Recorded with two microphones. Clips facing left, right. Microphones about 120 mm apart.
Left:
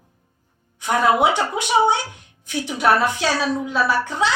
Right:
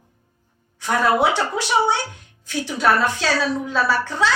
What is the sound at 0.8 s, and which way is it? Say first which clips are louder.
A child's voice: left 1 dB; 20° left (ahead or behind).